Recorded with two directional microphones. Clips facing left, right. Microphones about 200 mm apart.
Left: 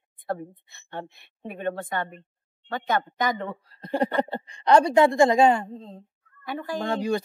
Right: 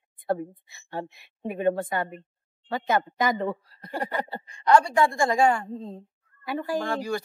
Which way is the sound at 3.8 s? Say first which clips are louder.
Left 6 dB; 20° left (ahead or behind).